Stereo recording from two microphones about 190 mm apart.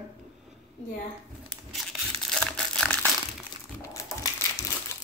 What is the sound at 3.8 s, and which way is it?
Crumpling, 15° left (ahead or behind).